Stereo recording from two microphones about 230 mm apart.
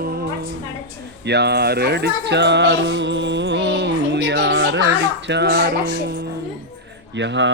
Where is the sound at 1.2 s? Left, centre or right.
Right.